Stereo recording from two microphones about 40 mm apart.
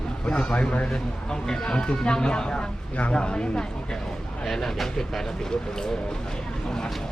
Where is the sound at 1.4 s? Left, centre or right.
Centre.